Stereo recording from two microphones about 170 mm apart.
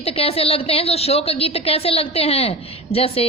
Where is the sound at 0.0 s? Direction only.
35° left (ahead or behind).